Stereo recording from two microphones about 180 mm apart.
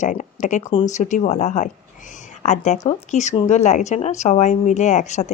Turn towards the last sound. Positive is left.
turn(degrees=40)  # may be behind; listen again after turning